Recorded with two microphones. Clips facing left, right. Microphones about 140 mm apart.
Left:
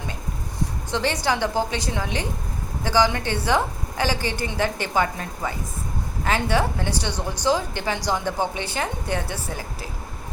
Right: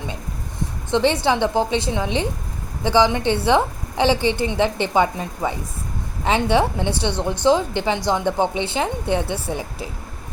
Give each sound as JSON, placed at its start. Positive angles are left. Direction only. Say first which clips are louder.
{"t": 0.9, "sound": "a woman's voice", "louder": "right 6 dB", "side_deg": -20}